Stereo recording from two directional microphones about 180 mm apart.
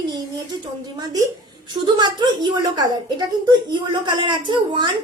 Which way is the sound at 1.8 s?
25° right (ahead or behind).